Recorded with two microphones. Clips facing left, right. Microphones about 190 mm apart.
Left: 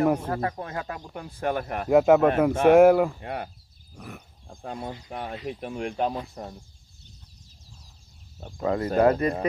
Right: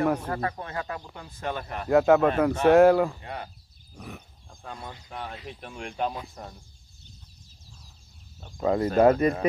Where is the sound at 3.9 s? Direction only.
Centre (ahead or behind).